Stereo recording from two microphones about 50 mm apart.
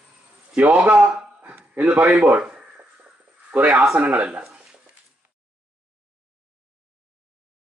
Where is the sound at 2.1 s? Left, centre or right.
Right.